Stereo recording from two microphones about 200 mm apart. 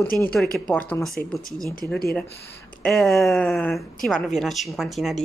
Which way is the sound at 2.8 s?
Centre (ahead or behind).